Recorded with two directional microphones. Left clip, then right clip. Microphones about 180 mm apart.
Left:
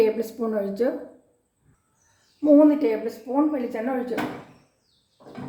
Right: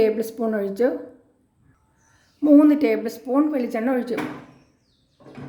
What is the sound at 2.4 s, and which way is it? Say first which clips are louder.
A woman's voice: right 1 dB; 45° right (ahead or behind).